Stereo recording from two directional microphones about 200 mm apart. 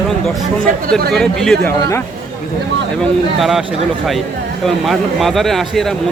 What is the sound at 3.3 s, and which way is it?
Speech, centre (ahead or behind).